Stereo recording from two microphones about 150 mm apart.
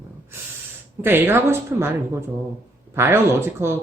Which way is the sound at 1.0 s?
15° right (ahead or behind).